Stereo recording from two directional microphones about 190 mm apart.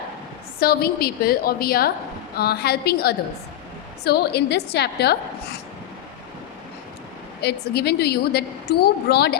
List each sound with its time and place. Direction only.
0.6 s a woman's voice: 55° left (ahead or behind)
7.4 s a woman's voice: 60° left (ahead or behind)